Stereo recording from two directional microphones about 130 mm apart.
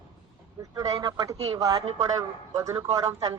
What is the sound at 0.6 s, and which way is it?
A woman's voice, 25° right (ahead or behind).